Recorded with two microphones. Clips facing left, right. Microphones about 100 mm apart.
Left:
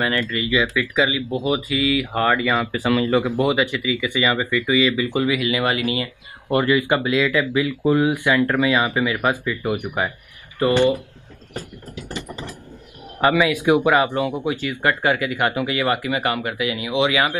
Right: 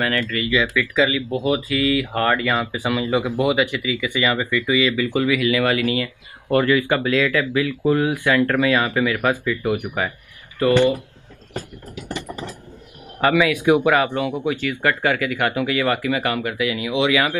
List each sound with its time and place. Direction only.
0.0 s speech: 15° left (ahead or behind)
2.6 s speech: 20° right (ahead or behind)
3.6 s speech: 15° left (ahead or behind)
13.2 s speech: 15° left (ahead or behind)